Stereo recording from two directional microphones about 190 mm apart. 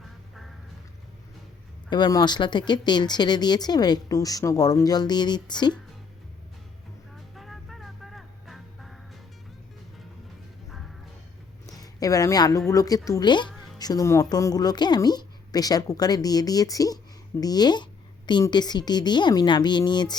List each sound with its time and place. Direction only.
0.0 s music: centre (ahead or behind)
1.9 s speech: 20° left (ahead or behind)
7.3 s music: centre (ahead or behind)
11.6 s a sound: 20° left (ahead or behind)
12.7 s speech: 20° left (ahead or behind)